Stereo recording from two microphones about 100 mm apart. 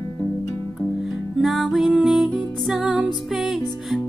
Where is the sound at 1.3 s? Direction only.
Centre (ahead or behind).